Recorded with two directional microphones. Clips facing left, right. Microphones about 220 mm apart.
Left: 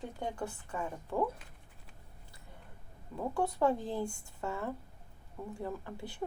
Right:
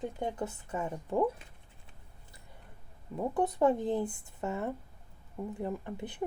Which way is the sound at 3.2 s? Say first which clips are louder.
Right 3 dB; 20° right (ahead or behind).